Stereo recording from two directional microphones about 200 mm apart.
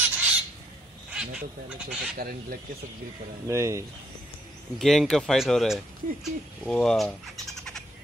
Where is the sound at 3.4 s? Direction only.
15° right (ahead or behind).